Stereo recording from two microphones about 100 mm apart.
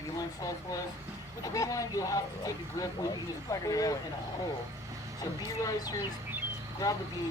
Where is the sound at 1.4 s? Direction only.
35° left (ahead or behind).